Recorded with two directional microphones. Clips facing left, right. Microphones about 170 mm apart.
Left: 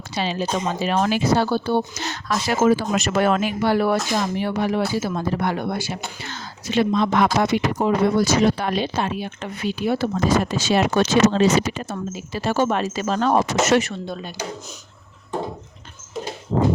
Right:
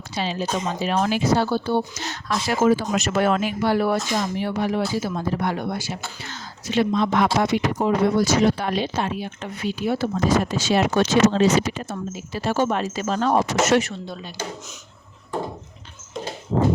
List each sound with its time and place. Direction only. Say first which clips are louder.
0.2 s speech: left 2 dB; 75° left (ahead or behind)
2.6 s speech: left 1 dB; 85° left; by 6.0 s 65° left (ahead or behind)
6.2 s speech: left 1 dB; 80° left
7.5 s speech: left 1 dB; 75° left (ahead or behind)